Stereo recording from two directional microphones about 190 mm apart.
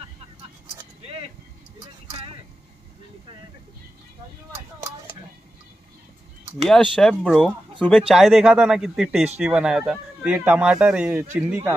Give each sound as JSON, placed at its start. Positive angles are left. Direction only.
{"t": 2.0, "sound": "vehicle", "side_deg": -30}
{"t": 6.6, "sound": "a man's voice", "side_deg": 0}